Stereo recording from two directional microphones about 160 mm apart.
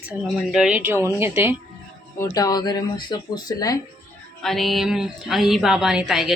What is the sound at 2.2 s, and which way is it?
Speech, 25° left (ahead or behind).